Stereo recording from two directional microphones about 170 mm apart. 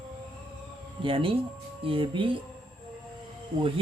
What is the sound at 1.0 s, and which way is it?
Speech, 30° right (ahead or behind).